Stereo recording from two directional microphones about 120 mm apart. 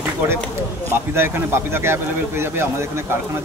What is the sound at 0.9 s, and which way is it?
Speech, 20° right (ahead or behind).